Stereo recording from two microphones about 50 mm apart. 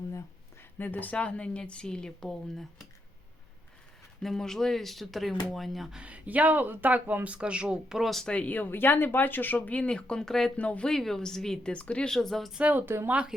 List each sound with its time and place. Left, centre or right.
0.8 s speech: left
1.1 s a woman's voice: left
4.2 s speech: centre
5.9 s speech: right
7.3 s speech: right
7.9 s speech: centre
8.2 s a woman's voice: left
8.4 s speech: left; by 10.5 s centre
10.6 s a woman's voice: left
10.8 s a woman's voice: centre
11.7 s a woman's voice: left
12.0 s a woman's voice: centre
12.5 s speech: right
12.8 s speech: right